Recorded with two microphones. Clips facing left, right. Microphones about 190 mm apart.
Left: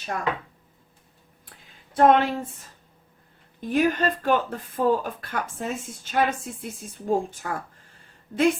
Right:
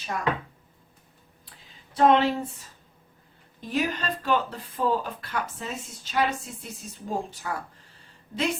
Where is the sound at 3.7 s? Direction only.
50° left (ahead or behind).